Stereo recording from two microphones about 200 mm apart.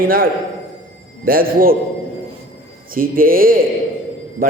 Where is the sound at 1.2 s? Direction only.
45° right (ahead or behind).